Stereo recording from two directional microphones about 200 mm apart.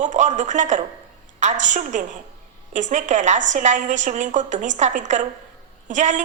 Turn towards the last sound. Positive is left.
turn(degrees=-35)  # may be behind; listen again after turning